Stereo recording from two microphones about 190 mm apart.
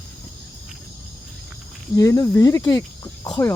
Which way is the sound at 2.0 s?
15° left (ahead or behind).